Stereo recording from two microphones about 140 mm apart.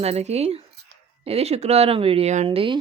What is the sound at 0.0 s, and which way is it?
Speech, 50° right (ahead or behind).